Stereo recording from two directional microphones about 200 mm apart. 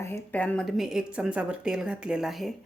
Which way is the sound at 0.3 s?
5° left (ahead or behind).